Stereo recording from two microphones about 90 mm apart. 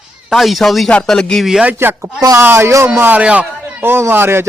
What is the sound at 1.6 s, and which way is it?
A man's voice, 25° right (ahead or behind).